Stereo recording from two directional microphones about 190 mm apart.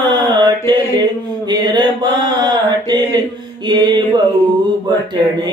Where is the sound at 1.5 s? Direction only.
25° right (ahead or behind).